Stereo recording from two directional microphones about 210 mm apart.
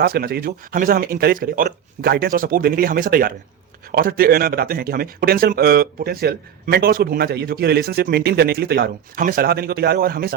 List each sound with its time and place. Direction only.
0.0 s speech: 45° right (ahead or behind)